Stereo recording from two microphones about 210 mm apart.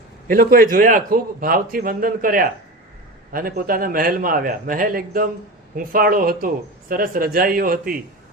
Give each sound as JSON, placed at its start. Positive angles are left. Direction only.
{"t": 0.3, "sound": "speech", "side_deg": -40}